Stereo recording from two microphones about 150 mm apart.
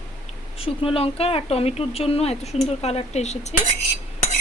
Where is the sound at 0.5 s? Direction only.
40° left (ahead or behind).